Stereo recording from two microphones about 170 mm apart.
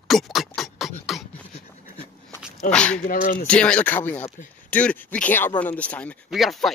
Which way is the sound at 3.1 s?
55° left (ahead or behind).